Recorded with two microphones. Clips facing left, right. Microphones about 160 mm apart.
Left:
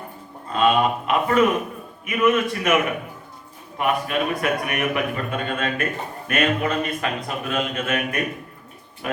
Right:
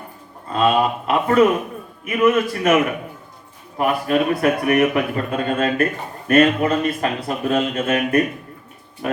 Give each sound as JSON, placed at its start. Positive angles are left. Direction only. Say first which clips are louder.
{"t": 0.5, "sound": "a man's voice", "louder": "right 1 dB", "side_deg": -40}
{"t": 3.8, "sound": "a man's voice", "louder": "right 4 dB", "side_deg": -35}